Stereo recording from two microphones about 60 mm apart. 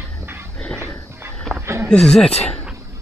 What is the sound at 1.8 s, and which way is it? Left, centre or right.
Speech, centre.